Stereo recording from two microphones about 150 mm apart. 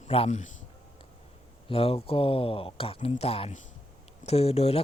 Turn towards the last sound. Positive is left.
turn(degrees=45)  # may be behind; listen again after turning